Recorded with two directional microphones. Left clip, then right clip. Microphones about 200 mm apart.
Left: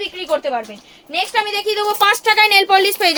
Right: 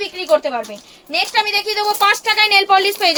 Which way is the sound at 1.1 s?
15° left (ahead or behind).